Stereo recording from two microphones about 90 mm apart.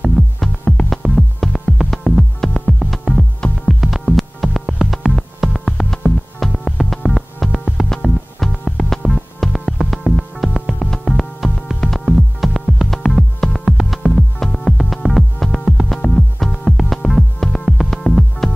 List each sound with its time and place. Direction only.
0.0 s music: 5° left (ahead or behind)